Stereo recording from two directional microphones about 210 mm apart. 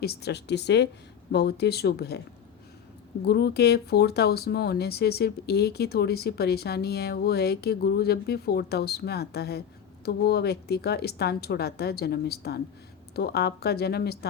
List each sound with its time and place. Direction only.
0.0 s speech: 50° left (ahead or behind)
3.2 s speech: 50° left (ahead or behind)